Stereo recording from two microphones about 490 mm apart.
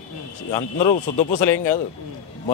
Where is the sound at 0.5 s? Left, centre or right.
Centre.